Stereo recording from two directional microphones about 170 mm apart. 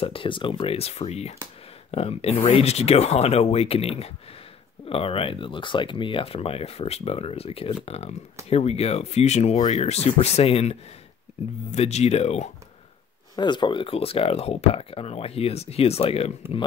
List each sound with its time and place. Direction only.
0.0 s speech: 30° left (ahead or behind)
13.4 s speech: 25° left (ahead or behind)